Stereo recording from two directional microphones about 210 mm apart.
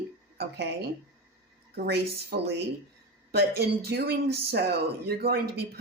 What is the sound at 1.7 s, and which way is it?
Speech, 50° right (ahead or behind).